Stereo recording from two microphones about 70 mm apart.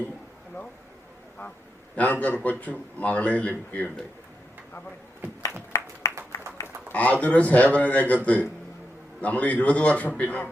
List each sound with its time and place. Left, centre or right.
2.0 s speech: left
5.7 s applause: left
6.9 s speech: left